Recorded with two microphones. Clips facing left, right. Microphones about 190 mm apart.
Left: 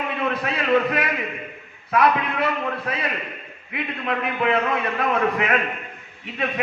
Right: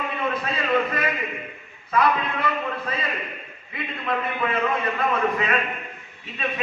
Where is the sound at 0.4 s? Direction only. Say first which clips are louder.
Left 4 dB; 70° left (ahead or behind).